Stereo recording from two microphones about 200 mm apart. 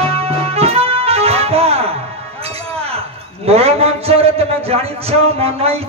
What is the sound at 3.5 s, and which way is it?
A man's voice, 30° right (ahead or behind).